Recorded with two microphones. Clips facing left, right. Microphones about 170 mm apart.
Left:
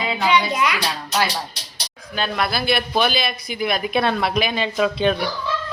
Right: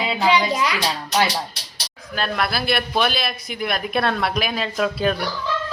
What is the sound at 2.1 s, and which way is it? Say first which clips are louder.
Speech: left 1 dB; centre (ahead or behind).